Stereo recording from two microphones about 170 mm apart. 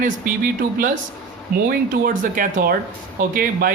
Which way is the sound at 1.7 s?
55° right (ahead or behind).